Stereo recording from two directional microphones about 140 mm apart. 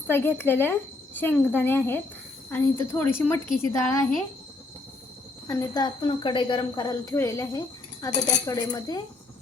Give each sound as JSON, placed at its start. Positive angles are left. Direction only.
{"t": 0.1, "sound": "speech", "side_deg": 15}
{"t": 5.5, "sound": "speech", "side_deg": 25}
{"t": 8.1, "sound": "speech", "side_deg": 55}
{"t": 8.4, "sound": "speech", "side_deg": 25}